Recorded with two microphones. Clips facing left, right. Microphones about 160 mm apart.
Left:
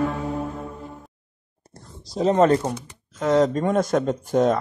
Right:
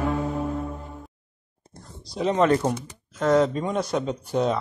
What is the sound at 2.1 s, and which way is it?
Speech, 40° left (ahead or behind).